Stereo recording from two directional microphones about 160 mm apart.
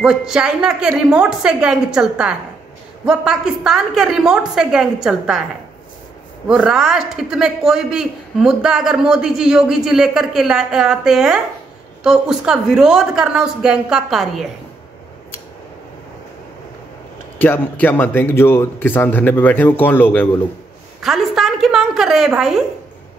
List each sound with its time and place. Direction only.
0.0 s speech: 5° right (ahead or behind)
6.4 s speech: 5° right (ahead or behind)
17.4 s a man's voice: 10° left (ahead or behind)
21.0 s speech: centre (ahead or behind)